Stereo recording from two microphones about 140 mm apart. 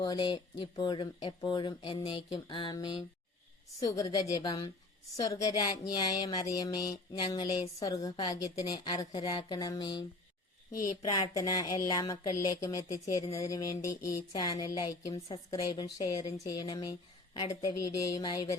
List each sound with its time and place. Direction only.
0.0 s speech: 30° left (ahead or behind)